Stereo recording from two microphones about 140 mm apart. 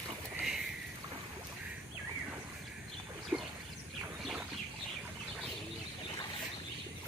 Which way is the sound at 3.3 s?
10° right (ahead or behind).